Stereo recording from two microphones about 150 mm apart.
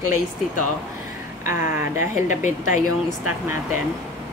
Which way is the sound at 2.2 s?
60° left (ahead or behind).